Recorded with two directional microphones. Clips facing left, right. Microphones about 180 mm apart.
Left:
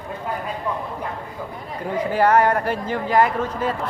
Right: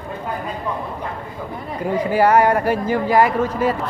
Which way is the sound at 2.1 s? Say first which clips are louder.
Right 2 dB; 10° right (ahead or behind).